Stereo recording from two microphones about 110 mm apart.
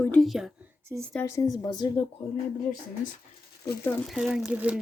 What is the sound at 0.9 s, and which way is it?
Speech, 30° right (ahead or behind).